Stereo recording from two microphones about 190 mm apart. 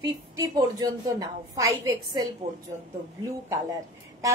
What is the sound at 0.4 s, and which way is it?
A woman's voice, 20° right (ahead or behind).